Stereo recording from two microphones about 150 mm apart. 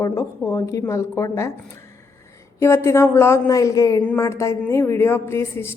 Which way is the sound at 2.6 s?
15° left (ahead or behind).